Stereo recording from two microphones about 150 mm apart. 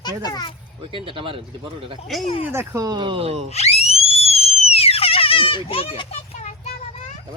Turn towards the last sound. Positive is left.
turn(degrees=50)  # may be behind; listen again after turning